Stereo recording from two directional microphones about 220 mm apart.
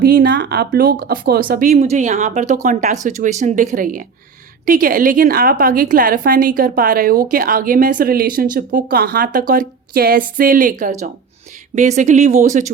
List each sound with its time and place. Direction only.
0.0 s a woman's voice: 45° right (ahead or behind)